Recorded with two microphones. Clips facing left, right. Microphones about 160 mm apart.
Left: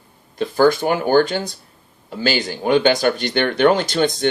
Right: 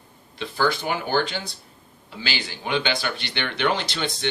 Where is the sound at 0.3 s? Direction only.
45° left (ahead or behind).